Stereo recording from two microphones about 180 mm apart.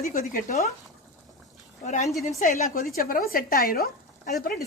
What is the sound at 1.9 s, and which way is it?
Speech, 40° left (ahead or behind).